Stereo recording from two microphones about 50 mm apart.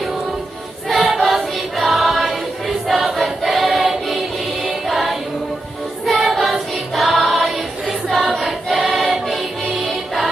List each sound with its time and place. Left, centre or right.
1.1 s music: centre
2.8 s choir: centre
4.6 s music: centre
6.3 s choir: centre